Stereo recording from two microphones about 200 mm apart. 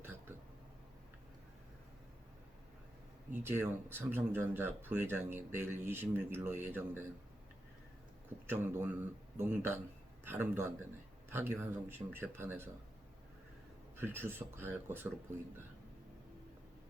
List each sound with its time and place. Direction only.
0.0 s a sound: 10° right (ahead or behind)
3.3 s speech: 10° right (ahead or behind)
8.4 s speech: 10° right (ahead or behind)
13.9 s speech: 10° right (ahead or behind)